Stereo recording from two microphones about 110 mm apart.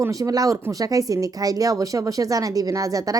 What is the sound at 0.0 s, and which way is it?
Speech, 30° right (ahead or behind).